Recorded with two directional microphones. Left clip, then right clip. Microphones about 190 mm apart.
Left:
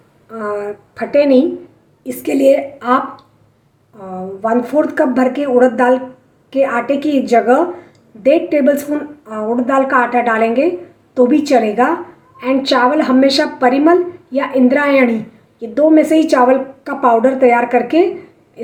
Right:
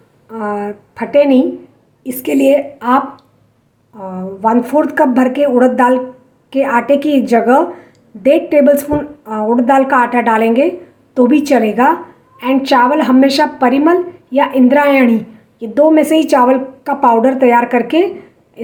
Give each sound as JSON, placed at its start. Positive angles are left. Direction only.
{"t": 0.3, "sound": "a woman's voice", "side_deg": -30}